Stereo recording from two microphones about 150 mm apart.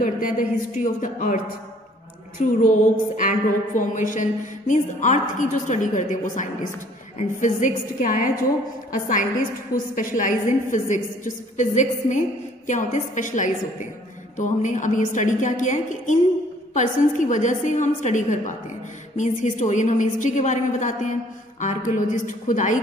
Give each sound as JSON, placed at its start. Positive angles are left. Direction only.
{"t": 0.0, "sound": "a woman's voice", "side_deg": 60}
{"t": 2.4, "sound": "a woman's voice", "side_deg": 60}